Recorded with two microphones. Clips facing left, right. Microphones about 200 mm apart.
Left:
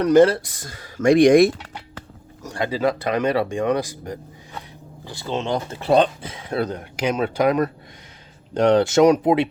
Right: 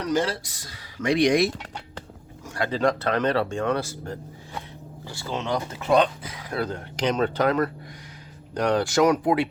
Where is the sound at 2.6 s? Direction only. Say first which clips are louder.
Left 1 dB; 5° left (ahead or behind).